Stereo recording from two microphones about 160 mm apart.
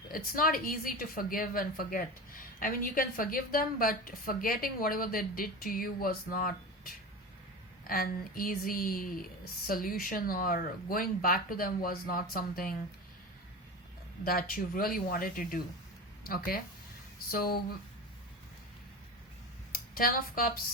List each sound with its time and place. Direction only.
0.1 s a woman's voice: 60° left (ahead or behind)
14.3 s a woman's voice: 65° left (ahead or behind)
19.7 s speech: 65° left (ahead or behind)